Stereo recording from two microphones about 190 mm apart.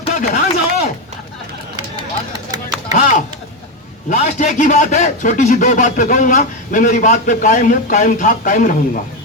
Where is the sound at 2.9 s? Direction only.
40° left (ahead or behind).